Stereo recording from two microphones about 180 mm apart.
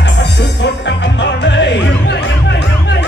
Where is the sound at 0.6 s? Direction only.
75° left (ahead or behind).